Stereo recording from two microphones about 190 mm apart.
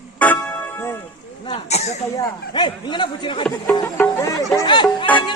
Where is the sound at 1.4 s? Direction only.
35° left (ahead or behind).